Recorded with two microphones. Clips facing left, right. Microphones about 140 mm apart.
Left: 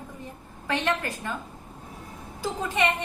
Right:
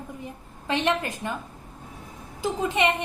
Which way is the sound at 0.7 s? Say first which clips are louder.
Right 2 dB; 20° right (ahead or behind).